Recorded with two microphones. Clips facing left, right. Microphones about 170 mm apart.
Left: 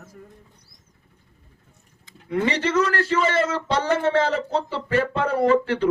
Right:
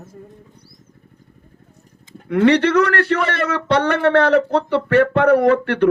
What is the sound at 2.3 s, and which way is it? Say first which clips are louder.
Speech: right 9 dB; 65° right (ahead or behind).